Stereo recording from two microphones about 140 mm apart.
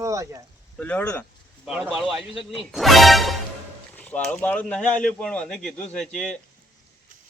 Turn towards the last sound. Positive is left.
turn(degrees=5)  # may be behind; listen again after turning